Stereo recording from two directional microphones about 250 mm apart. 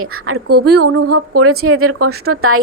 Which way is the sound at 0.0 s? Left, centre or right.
Right.